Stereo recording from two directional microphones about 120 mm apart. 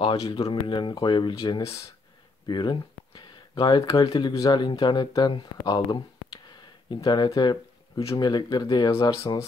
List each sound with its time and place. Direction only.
0.0 s speech: 50° left (ahead or behind)
1.6 s speech: 25° left (ahead or behind)
2.4 s speech: 40° left (ahead or behind)